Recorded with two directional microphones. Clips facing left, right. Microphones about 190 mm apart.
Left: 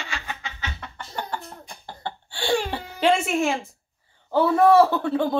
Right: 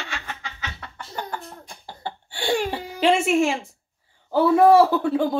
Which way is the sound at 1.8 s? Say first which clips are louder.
Even; 15° right (ahead or behind).